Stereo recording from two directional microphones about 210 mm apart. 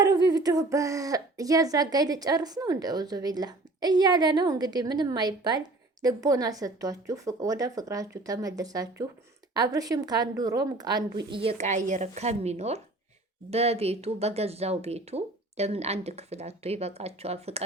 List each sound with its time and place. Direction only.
0.0 s a woman's voice: 20° right (ahead or behind)